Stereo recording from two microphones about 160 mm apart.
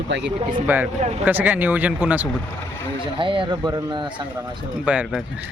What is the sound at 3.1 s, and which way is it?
Speech, 30° right (ahead or behind).